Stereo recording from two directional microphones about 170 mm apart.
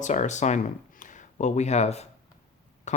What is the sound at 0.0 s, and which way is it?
Speech, 45° left (ahead or behind).